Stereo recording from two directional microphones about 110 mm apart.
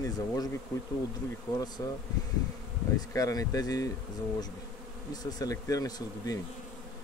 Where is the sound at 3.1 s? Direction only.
30° left (ahead or behind).